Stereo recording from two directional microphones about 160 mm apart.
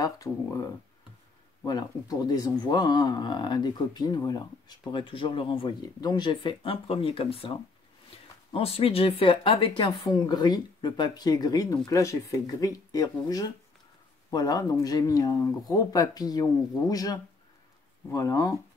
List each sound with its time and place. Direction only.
0.0 s speech: 20° left (ahead or behind); by 7.5 s 35° left (ahead or behind)
8.5 s speech: 35° left (ahead or behind); by 18.5 s 20° left (ahead or behind)